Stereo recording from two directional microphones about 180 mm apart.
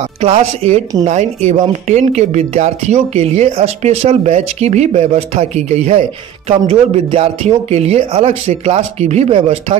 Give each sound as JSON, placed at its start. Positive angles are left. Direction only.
{"t": 0.2, "sound": "speech", "side_deg": -35}